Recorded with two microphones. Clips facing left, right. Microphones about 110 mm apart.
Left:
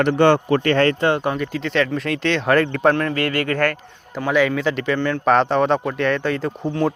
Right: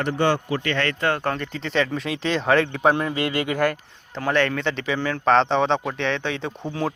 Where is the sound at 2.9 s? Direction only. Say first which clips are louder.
Left 3 dB; 15° right (ahead or behind).